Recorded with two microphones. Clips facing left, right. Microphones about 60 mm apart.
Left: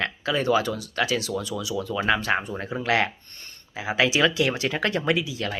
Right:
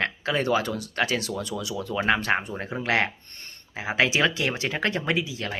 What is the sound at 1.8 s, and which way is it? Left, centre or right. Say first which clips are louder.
Speech: right 1 dB; right.